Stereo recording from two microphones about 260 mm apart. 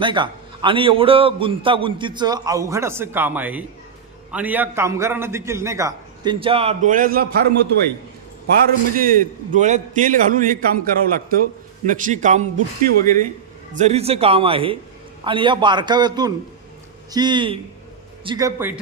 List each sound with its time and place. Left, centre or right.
0.0 s a man's voice: centre; by 7.3 s right
9.0 s a man's voice: right; by 18.7 s centre